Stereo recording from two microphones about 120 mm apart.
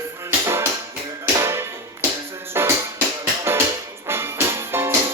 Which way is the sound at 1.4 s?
20° right (ahead or behind).